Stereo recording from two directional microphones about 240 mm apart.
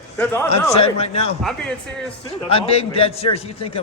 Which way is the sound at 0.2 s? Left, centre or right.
Centre.